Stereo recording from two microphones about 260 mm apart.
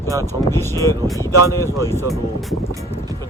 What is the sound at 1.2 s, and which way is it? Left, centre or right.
Speech, centre.